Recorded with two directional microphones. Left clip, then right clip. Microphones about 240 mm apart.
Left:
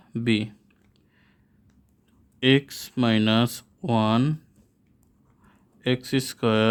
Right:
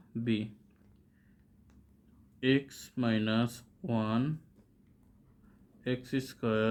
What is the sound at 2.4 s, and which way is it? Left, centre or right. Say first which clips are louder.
Speech: left 9 dB; left.